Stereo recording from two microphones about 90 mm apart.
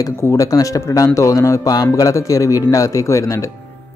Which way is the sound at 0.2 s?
35° left (ahead or behind).